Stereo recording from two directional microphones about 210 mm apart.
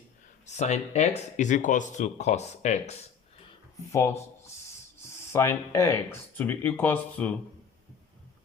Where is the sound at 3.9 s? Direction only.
15° left (ahead or behind).